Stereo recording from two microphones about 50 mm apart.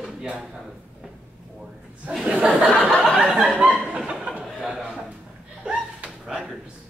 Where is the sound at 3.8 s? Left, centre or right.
Right.